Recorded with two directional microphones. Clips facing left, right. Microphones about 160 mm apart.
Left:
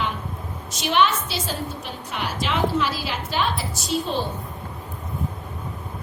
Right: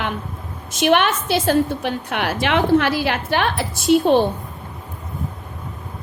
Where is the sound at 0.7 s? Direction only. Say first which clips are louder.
Right 4 dB; 55° right (ahead or behind).